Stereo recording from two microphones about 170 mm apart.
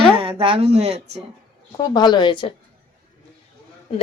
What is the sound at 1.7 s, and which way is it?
Speech, 25° left (ahead or behind).